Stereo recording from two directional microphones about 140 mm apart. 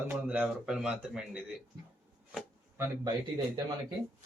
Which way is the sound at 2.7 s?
25° right (ahead or behind).